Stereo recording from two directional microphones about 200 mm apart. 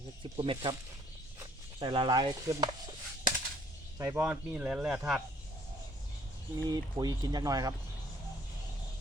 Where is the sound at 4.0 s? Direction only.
10° right (ahead or behind).